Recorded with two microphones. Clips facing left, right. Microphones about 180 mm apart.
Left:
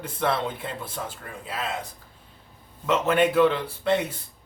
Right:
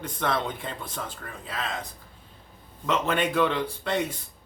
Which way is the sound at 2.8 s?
5° left (ahead or behind).